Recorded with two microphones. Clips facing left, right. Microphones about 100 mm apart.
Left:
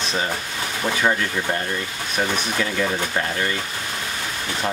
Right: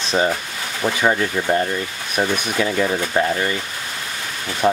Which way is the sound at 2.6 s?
25° right (ahead or behind).